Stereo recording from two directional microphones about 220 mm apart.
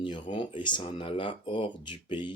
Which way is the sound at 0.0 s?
20° left (ahead or behind).